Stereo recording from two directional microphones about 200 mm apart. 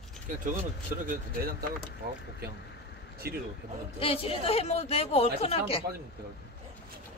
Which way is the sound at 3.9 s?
30° left (ahead or behind).